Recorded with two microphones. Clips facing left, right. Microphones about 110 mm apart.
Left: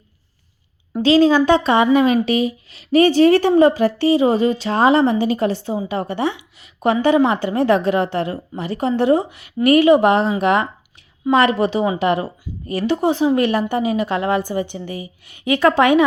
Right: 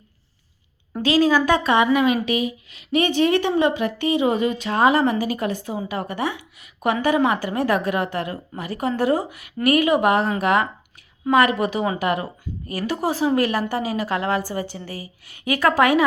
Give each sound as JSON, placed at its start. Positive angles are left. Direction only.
{"t": 1.0, "sound": "speech", "side_deg": 30}